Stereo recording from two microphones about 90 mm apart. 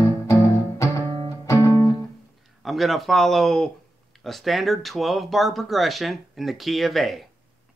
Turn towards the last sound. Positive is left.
turn(degrees=0)  # may be behind; listen again after turning